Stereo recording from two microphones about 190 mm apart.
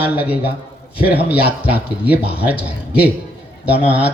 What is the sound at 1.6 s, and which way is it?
Speech, 10° right (ahead or behind).